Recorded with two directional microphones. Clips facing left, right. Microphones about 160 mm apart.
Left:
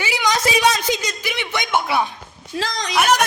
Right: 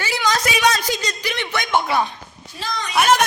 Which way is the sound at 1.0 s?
10° left (ahead or behind).